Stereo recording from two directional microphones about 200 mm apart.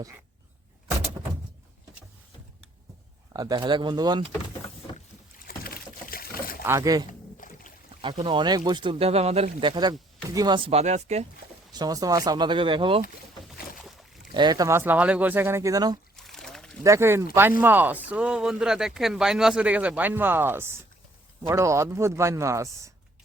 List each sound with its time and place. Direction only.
3.3 s speech: 20° right (ahead or behind)
5.5 s rowboat: 45° left (ahead or behind)
6.7 s speech: 15° right (ahead or behind)
7.1 s rowboat: 40° left (ahead or behind)
8.1 s speech: 25° right (ahead or behind)
11.8 s speech: 20° right (ahead or behind)
13.5 s boat: centre (ahead or behind)
14.3 s speech: 20° right (ahead or behind)
16.1 s pour: centre (ahead or behind)
16.8 s speech: 15° right (ahead or behind)